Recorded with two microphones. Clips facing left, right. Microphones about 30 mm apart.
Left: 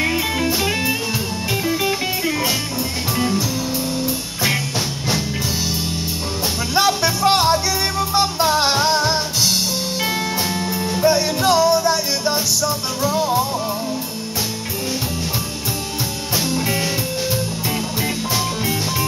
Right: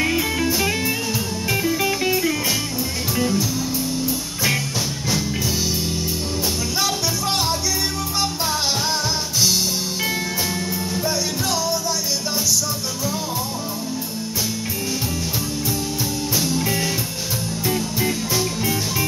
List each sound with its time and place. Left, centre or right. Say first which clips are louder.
0.0 s music: left 1 dB; centre
1.7 s music: even; left
6.7 s music: left 9 dB; left
11.0 s music: left 9 dB; left
16.3 s music: left 3 dB; left